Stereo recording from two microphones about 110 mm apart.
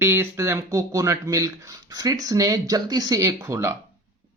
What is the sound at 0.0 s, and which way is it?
Speech, 25° right (ahead or behind).